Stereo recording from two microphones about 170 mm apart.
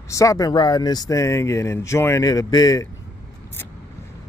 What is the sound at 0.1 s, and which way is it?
Speech, 20° left (ahead or behind).